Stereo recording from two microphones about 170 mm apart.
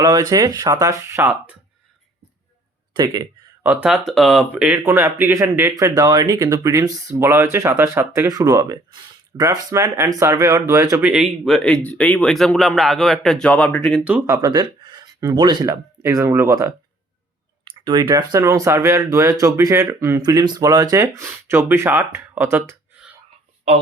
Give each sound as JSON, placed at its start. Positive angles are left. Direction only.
{"t": 0.0, "sound": "speech", "side_deg": -25}
{"t": 2.9, "sound": "speech", "side_deg": -25}
{"t": 3.6, "sound": "speech", "side_deg": -10}
{"t": 11.1, "sound": "speech", "side_deg": 0}
{"t": 14.3, "sound": "speech", "side_deg": -20}
{"t": 17.7, "sound": "speech", "side_deg": -30}